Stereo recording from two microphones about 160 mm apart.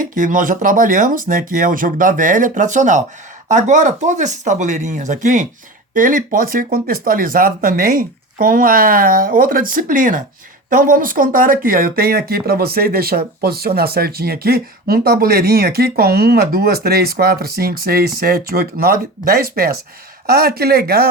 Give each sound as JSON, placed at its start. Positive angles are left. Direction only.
{"t": 0.0, "sound": "speech", "side_deg": -55}